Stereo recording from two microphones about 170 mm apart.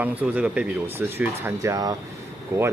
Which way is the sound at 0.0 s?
10° right (ahead or behind).